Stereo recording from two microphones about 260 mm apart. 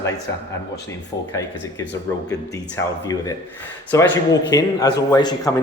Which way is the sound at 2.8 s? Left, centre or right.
Centre.